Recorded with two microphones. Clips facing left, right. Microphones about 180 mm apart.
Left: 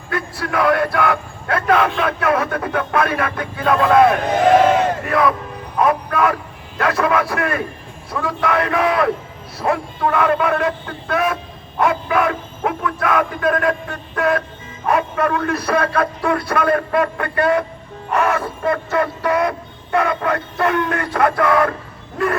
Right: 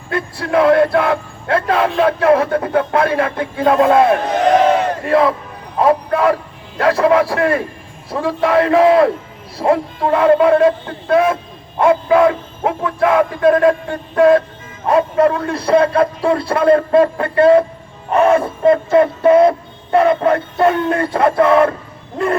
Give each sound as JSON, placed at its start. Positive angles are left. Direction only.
{"t": 0.1, "sound": "speech", "side_deg": -25}